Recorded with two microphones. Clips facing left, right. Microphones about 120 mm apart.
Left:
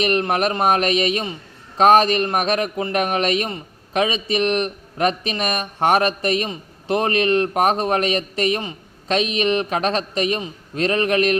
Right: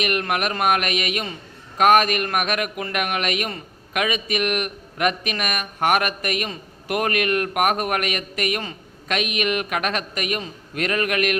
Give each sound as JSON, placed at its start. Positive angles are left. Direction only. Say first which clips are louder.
{"t": 0.0, "sound": "a man's voice", "louder": "left 4 dB", "side_deg": 30}